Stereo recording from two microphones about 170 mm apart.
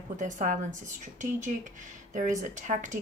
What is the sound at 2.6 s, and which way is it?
Speech, 45° right (ahead or behind).